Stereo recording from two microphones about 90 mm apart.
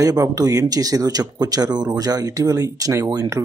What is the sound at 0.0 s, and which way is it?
Speech, 40° right (ahead or behind).